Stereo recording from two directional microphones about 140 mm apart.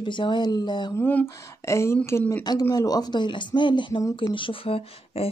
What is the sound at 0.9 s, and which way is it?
Speech, 15° left (ahead or behind).